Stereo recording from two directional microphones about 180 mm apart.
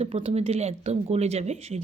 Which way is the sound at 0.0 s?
35° right (ahead or behind).